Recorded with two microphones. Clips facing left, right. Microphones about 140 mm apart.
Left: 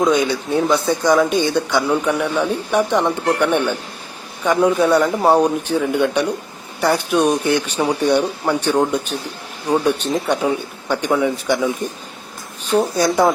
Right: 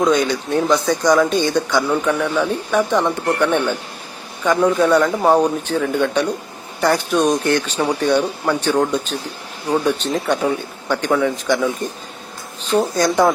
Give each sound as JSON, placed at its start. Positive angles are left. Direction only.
{"t": 0.5, "sound": "speech", "side_deg": 15}
{"t": 12.7, "sound": "speech", "side_deg": 0}